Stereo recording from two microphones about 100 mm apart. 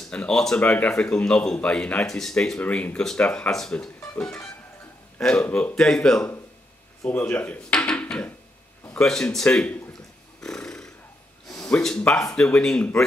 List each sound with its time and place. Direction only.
0.1 s speech: 10° left (ahead or behind)
5.2 s speech: 10° left (ahead or behind)
7.1 s speech: 20° left (ahead or behind)
10.4 s a sound: 5° left (ahead or behind)
11.4 s a sound: 35° left (ahead or behind)
11.7 s speech: 10° left (ahead or behind)